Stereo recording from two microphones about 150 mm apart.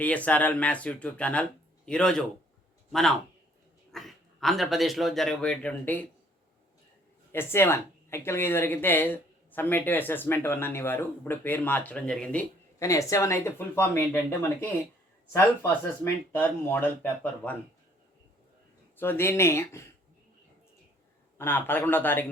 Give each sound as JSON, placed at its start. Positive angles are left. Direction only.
{"t": 0.0, "sound": "a man's voice", "side_deg": 10}
{"t": 7.3, "sound": "speech", "side_deg": 15}
{"t": 12.8, "sound": "speech", "side_deg": 20}
{"t": 16.3, "sound": "speech", "side_deg": 15}
{"t": 18.9, "sound": "speech", "side_deg": 15}
{"t": 21.3, "sound": "speech", "side_deg": 15}